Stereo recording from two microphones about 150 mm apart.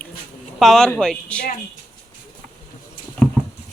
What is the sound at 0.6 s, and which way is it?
Speech, centre (ahead or behind).